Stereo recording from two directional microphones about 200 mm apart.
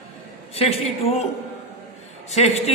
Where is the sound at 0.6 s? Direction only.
30° left (ahead or behind).